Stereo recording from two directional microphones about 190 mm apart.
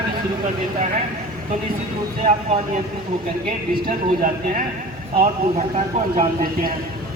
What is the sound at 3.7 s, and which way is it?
Speech, 45° right (ahead or behind).